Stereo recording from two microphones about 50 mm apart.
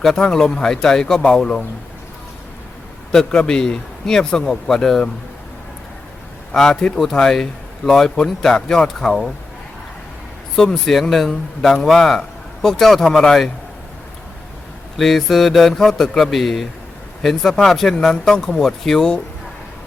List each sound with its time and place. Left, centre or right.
0.3 s a man's voice: centre
3.1 s a man's voice: centre
6.5 s a man's voice: centre
10.5 s a man's voice: centre
14.9 s a man's voice: centre